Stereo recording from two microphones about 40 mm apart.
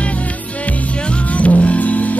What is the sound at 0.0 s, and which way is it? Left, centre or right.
Music, left.